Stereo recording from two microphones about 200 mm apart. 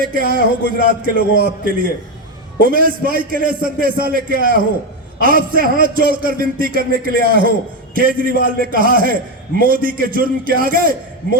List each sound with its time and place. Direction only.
0.0 s a man's voice: 45° right (ahead or behind)